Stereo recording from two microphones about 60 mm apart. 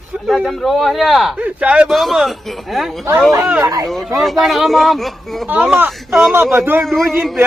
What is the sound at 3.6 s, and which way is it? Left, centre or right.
Speech, right.